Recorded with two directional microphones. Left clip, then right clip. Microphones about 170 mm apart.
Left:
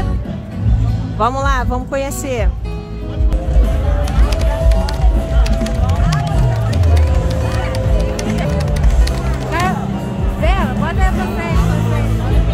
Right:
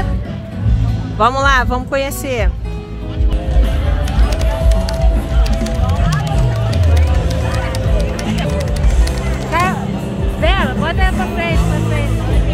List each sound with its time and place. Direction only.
1.2 s speech: 5° left (ahead or behind)
9.5 s music: 65° right (ahead or behind)
10.4 s music: 55° right (ahead or behind)